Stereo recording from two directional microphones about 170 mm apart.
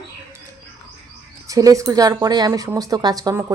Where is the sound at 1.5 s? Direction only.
20° right (ahead or behind).